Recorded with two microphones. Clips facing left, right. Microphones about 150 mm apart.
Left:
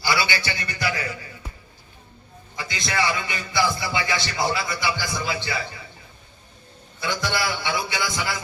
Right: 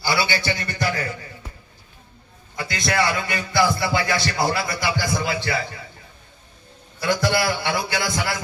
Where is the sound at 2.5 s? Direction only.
60° right (ahead or behind).